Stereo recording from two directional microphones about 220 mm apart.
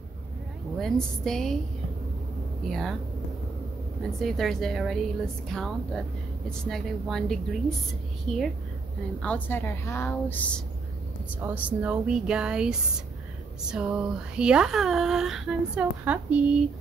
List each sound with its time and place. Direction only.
0.7 s speech: centre (ahead or behind)
2.7 s speech: centre (ahead or behind)
4.2 s a woman's voice: centre (ahead or behind)
11.4 s speech: 5° right (ahead or behind)